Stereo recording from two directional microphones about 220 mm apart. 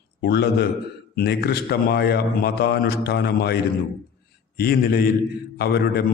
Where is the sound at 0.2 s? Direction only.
45° left (ahead or behind).